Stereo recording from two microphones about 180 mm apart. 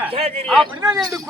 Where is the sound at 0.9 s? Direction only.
20° right (ahead or behind).